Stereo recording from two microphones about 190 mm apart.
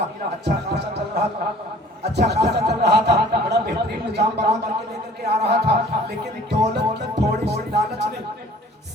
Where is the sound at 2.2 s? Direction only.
60° right (ahead or behind).